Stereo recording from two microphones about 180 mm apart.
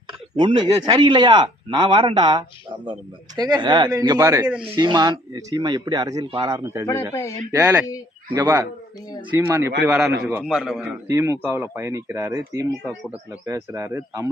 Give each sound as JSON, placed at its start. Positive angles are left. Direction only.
{"t": 0.3, "sound": "speech", "side_deg": -25}
{"t": 7.1, "sound": "a man's voice", "side_deg": 15}
{"t": 7.5, "sound": "a man's voice", "side_deg": -10}
{"t": 11.1, "sound": "speech", "side_deg": -15}